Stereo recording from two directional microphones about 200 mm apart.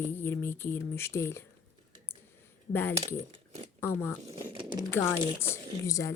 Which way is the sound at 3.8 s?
10° left (ahead or behind).